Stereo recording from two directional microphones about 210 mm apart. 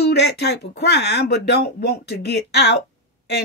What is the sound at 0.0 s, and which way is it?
Speech, 50° left (ahead or behind).